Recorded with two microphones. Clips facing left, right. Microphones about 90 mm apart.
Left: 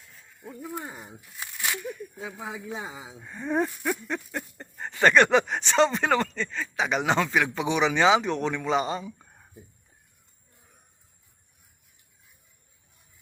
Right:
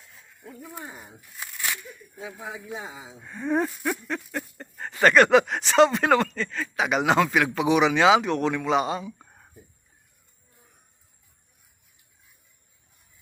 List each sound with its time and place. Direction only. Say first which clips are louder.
2.7 s speech: even; 15° left (ahead or behind); by 9.2 s 5° right (ahead or behind)